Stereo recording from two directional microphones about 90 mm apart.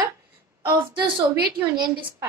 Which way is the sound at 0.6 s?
60° right (ahead or behind).